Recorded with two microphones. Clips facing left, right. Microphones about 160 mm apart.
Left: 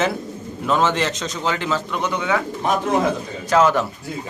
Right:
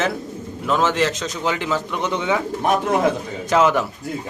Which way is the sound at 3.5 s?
15° right (ahead or behind).